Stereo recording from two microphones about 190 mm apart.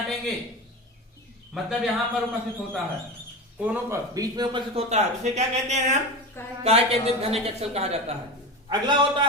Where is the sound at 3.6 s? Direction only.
10° right (ahead or behind).